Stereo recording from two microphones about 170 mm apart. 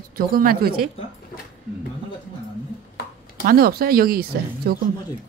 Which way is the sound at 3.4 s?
60° right (ahead or behind).